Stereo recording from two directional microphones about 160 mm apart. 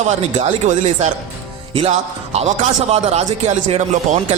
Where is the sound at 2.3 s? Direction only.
40° right (ahead or behind).